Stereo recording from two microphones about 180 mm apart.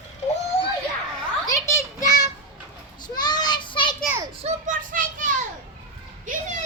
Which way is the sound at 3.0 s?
25° left (ahead or behind).